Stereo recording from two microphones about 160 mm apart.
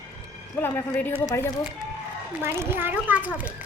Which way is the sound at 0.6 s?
15° left (ahead or behind).